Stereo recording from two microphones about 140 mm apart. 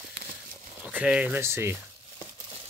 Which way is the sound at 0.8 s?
5° right (ahead or behind).